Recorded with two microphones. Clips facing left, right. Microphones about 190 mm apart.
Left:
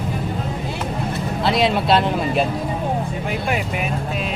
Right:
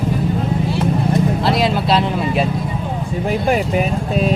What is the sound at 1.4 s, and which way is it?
Vehicle, centre (ahead or behind).